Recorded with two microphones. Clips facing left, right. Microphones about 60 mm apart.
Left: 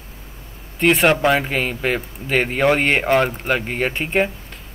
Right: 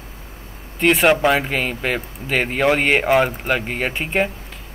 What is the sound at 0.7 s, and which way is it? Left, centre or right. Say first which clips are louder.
Speech: even; centre.